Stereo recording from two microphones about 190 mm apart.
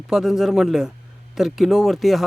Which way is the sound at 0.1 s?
Centre (ahead or behind).